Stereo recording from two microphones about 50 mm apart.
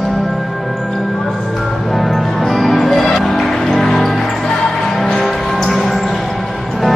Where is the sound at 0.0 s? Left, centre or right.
Centre.